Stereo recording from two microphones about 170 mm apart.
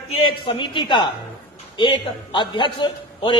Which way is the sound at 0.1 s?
30° left (ahead or behind).